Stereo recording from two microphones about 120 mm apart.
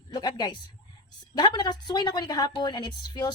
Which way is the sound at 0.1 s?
35° left (ahead or behind).